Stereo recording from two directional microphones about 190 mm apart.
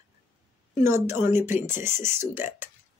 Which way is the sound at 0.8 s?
15° right (ahead or behind).